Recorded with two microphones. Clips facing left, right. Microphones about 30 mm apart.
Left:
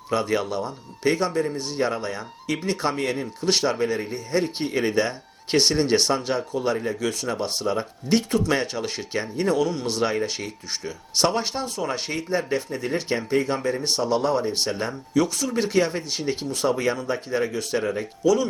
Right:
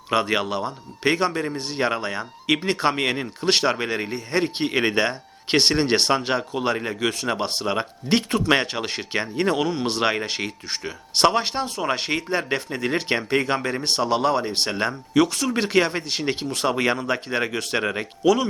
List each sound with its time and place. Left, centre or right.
0.1 s a man's voice: right